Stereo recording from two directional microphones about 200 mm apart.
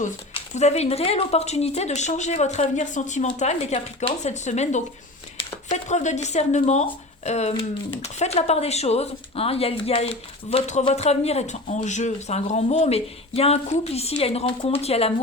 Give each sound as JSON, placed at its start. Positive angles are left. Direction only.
{"t": 0.0, "sound": "speech", "side_deg": 35}